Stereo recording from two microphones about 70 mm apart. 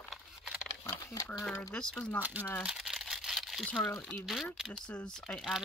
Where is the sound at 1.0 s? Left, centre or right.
Left.